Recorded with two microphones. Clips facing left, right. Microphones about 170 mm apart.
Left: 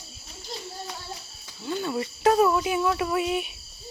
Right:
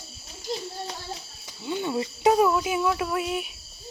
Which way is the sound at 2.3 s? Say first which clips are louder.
Even; 5° right (ahead or behind).